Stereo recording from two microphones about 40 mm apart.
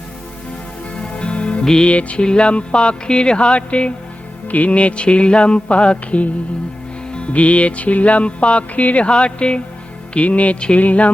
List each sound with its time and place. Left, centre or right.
1.1 s music: left
1.6 s music: centre
1.9 s music: left
9.0 s music: left
10.2 s music: left